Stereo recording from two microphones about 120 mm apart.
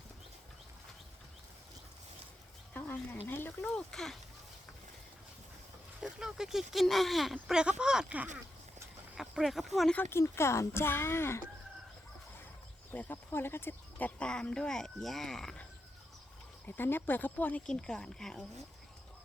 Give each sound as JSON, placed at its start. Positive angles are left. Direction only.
{"t": 2.7, "sound": "a sound", "side_deg": 15}
{"t": 3.2, "sound": "speech", "side_deg": 15}
{"t": 3.8, "sound": "speech", "side_deg": 5}
{"t": 6.0, "sound": "speech", "side_deg": -5}
{"t": 9.9, "sound": "speech", "side_deg": 15}
{"t": 12.9, "sound": "speech", "side_deg": 15}
{"t": 16.6, "sound": "speech", "side_deg": 15}